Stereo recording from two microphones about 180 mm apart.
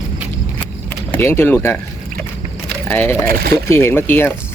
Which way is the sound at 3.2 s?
55° right (ahead or behind).